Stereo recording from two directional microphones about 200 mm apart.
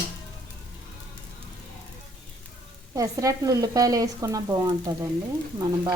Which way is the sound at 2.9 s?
15° right (ahead or behind).